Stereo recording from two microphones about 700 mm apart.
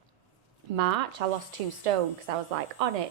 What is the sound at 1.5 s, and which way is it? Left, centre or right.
A woman's voice, right.